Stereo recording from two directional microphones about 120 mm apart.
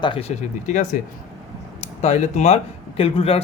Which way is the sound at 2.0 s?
65° left (ahead or behind).